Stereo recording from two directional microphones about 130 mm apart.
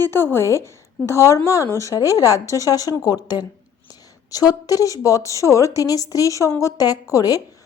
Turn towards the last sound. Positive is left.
turn(degrees=25)  # may be behind; listen again after turning